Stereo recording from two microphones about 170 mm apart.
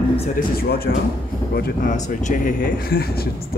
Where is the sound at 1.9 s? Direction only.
45° left (ahead or behind); by 3.2 s 65° left (ahead or behind).